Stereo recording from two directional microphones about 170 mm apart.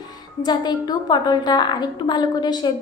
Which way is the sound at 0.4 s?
25° left (ahead or behind).